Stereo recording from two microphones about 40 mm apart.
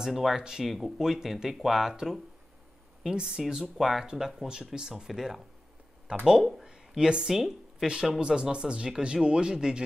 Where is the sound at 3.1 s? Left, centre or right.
Centre.